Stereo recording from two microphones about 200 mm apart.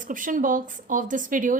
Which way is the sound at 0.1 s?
40° right (ahead or behind).